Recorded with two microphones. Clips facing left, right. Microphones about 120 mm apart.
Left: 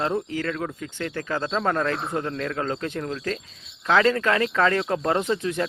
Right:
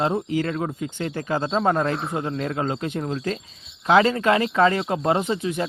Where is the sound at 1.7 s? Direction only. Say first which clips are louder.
Right 2 dB; 35° right (ahead or behind).